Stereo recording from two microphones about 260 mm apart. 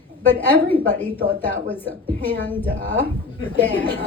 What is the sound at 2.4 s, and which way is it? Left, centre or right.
A woman's voice, centre.